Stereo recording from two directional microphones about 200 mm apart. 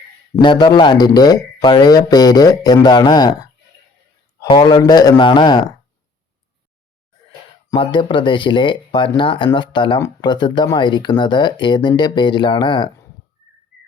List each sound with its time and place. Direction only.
0.4 s speech: 20° left (ahead or behind)
7.3 s speech: 25° left (ahead or behind)